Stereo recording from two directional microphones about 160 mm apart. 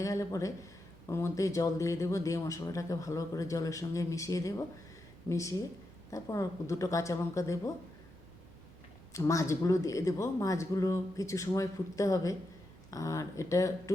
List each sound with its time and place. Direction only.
0.0 s speech: 20° left (ahead or behind)
9.1 s speech: 20° left (ahead or behind)